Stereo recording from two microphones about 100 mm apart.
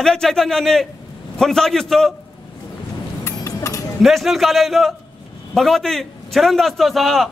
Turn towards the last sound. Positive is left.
turn(degrees=0)  # may be behind; listen again after turning